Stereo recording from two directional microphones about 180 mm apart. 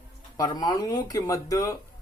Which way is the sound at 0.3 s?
20° left (ahead or behind).